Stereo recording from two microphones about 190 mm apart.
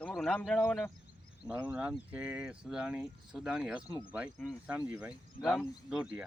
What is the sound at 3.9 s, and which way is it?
Speech, 20° left (ahead or behind).